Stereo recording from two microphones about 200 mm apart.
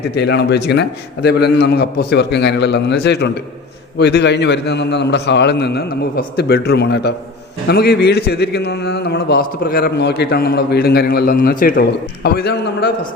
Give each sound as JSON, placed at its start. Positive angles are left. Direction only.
{"t": 0.0, "sound": "a man's voice", "side_deg": 55}